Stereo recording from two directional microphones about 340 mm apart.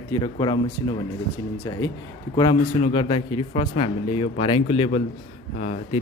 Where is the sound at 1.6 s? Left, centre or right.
Centre.